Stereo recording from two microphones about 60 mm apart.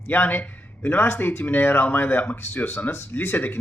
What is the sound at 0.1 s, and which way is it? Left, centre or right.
Speech, left.